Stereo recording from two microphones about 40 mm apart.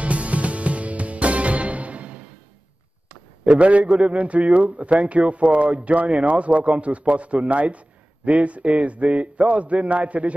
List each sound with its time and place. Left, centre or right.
0.0 s music: right
3.4 s a man's voice: right